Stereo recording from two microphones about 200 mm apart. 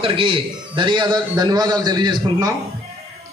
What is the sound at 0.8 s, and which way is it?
A man's voice, 25° right (ahead or behind).